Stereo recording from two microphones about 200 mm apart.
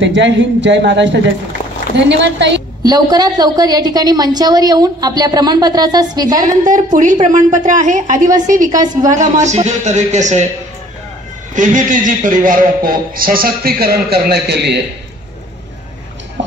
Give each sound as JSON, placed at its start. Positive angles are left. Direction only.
{"t": 0.0, "sound": "a woman's voice", "side_deg": -65}
{"t": 2.8, "sound": "a woman's voice", "side_deg": -20}
{"t": 6.6, "sound": "speech", "side_deg": -40}
{"t": 11.5, "sound": "a man's voice", "side_deg": -40}